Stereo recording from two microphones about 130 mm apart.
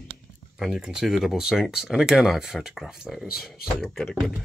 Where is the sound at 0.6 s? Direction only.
5° right (ahead or behind).